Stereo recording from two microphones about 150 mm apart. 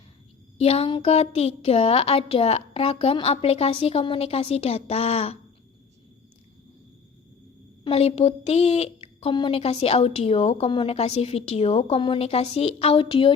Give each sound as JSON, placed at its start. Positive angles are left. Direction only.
{"t": 0.6, "sound": "a woman's voice", "side_deg": 40}
{"t": 7.9, "sound": "a woman's voice", "side_deg": 40}